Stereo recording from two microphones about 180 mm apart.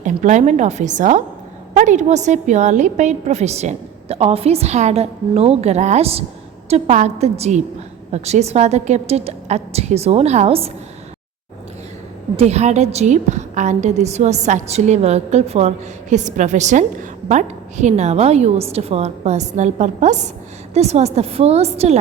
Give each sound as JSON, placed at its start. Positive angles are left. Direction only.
{"t": 0.0, "sound": "a woman's voice", "side_deg": -40}
{"t": 12.4, "sound": "a woman's voice", "side_deg": -35}